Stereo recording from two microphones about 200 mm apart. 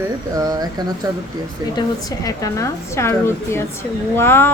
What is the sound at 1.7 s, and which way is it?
A woman's voice, 20° left (ahead or behind).